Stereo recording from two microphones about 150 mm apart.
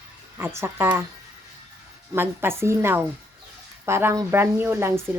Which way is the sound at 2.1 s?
15° right (ahead or behind).